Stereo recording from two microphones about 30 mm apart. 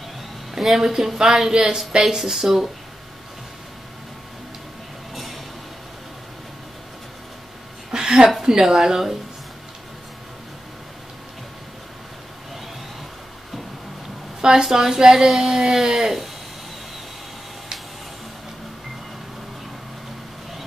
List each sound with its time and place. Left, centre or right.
0.6 s speech: centre
0.9 s speech: centre
5.1 s train: centre
7.9 s a sound: right
8.4 s speech: centre
14.4 s speech: centre